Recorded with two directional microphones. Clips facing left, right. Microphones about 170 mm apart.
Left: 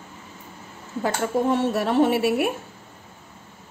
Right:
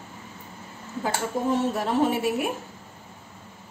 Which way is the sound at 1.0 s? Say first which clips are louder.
Left 4 dB; 70° left (ahead or behind).